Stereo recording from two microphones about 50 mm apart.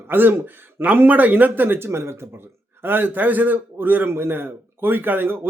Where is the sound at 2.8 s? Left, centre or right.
Right.